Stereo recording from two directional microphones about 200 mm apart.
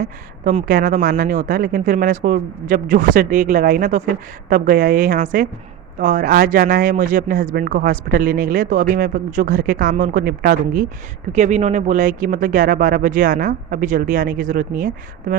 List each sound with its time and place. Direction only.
0.0 s speech: 40° right (ahead or behind)